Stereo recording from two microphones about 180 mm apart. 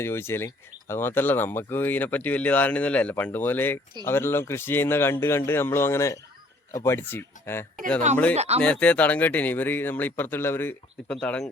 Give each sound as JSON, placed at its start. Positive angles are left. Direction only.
{"t": 0.0, "sound": "speech", "side_deg": 15}
{"t": 8.4, "sound": "speech", "side_deg": -35}
{"t": 8.6, "sound": "speech", "side_deg": 5}